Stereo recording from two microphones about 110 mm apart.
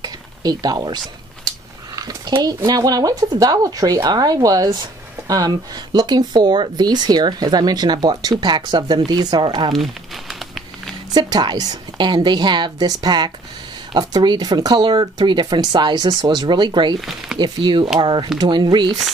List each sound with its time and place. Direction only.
0.0 s a sound: 35° right (ahead or behind)
2.4 s speech: 35° right (ahead or behind)
11.1 s speech: 40° right (ahead or behind)